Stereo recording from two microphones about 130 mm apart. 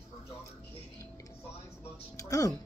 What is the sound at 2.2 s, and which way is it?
Speech, 25° left (ahead or behind).